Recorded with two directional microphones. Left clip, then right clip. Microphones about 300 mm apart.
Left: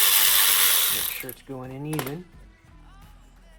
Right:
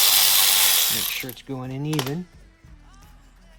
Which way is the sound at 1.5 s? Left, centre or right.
Right.